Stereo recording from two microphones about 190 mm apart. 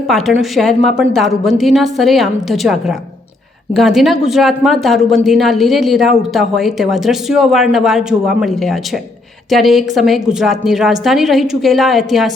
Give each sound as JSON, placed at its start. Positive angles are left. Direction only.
{"t": 0.1, "sound": "speech", "side_deg": 0}